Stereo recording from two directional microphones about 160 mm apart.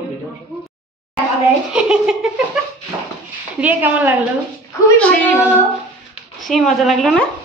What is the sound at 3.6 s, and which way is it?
Speech, 10° right (ahead or behind).